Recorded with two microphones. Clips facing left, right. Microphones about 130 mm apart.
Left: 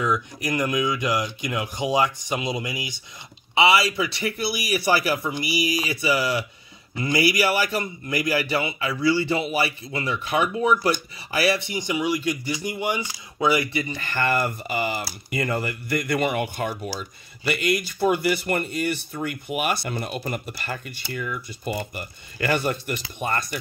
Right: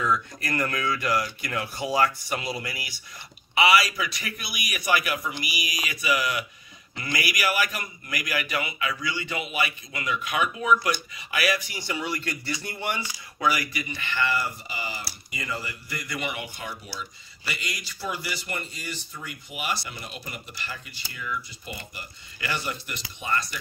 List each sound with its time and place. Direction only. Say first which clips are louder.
0.0 s a man's voice: left 2 dB; 15° left (ahead or behind)
13.4 s speech: left 5 dB; 25° left (ahead or behind); by 23.6 s 50° left (ahead or behind)